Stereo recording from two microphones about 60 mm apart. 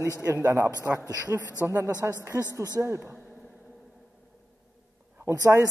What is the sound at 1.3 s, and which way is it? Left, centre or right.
Speech, right.